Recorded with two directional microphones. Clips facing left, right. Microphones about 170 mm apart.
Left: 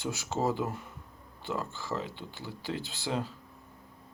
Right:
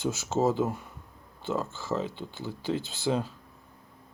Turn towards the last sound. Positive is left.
turn(degrees=-20)  # may be behind; listen again after turning